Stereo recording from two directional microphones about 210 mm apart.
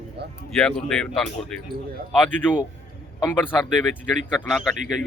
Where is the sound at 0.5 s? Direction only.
Centre (ahead or behind).